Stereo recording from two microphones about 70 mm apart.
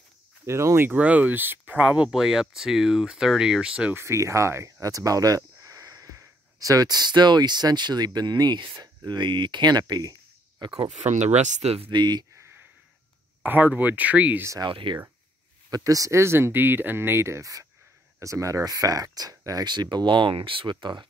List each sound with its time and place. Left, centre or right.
0.5 s speech: right
0.8 s speech: right
3.9 s speech: right
4.6 s a sound: right
6.1 s speech: right
10.6 s speech: right
11.9 s speech: right
13.4 s speech: right
14.6 s speech: right
15.7 s speech: right
16.2 s speech: right